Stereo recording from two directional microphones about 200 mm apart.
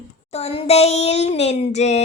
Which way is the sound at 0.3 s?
30° left (ahead or behind).